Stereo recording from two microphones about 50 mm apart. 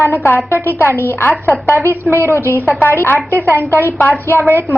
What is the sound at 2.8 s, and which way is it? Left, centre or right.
A woman's voice, left.